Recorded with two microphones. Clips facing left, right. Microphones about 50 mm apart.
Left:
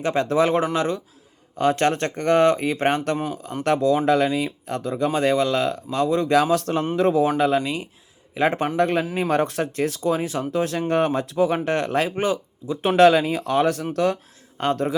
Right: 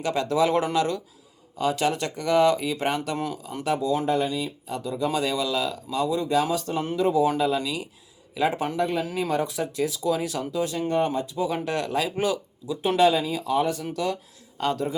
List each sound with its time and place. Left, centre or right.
0.0 s speech: left
1.5 s speech: left
4.0 s speech: left
4.3 s speech: left
10.1 s speech: left
10.5 s speech: left
11.5 s speech: left
13.0 s speech: left
14.6 s speech: left